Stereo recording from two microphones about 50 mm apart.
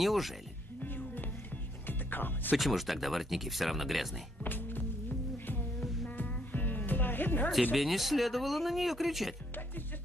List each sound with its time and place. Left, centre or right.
0.0 s speech: centre
0.8 s music: left
2.5 s speech: centre
4.4 s music: left
6.0 s music: left
7.7 s speech: centre